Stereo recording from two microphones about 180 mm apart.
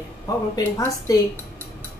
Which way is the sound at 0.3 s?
20° left (ahead or behind).